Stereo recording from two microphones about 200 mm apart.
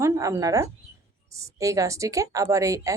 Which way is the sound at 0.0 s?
15° right (ahead or behind).